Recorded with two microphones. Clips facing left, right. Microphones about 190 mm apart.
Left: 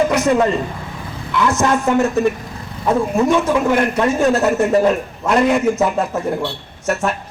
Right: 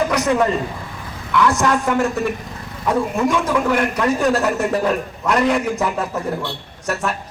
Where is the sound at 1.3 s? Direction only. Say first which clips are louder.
Even; 20° left (ahead or behind).